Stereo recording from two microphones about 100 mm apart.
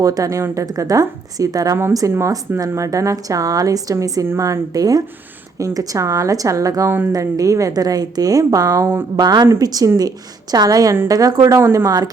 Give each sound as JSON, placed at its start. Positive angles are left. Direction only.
{"t": 0.0, "sound": "speech", "side_deg": -35}